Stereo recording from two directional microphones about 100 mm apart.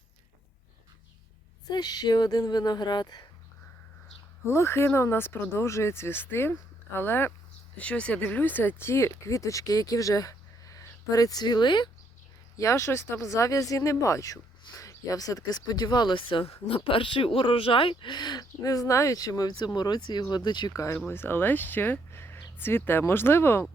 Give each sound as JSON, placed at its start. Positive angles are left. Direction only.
{"t": 1.6, "sound": "speech", "side_deg": 45}
{"t": 4.4, "sound": "speech", "side_deg": 25}
{"t": 12.5, "sound": "speech", "side_deg": 30}
{"t": 20.7, "sound": "speech", "side_deg": 30}